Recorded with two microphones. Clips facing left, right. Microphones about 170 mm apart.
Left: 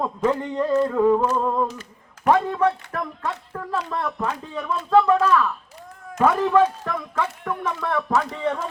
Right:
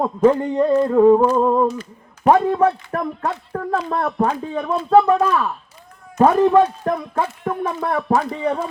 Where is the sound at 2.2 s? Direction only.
35° right (ahead or behind).